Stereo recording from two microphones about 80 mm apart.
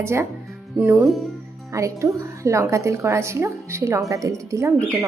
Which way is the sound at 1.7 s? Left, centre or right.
Right.